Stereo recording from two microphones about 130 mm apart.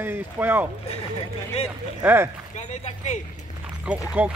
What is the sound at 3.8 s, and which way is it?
Speech, 10° right (ahead or behind).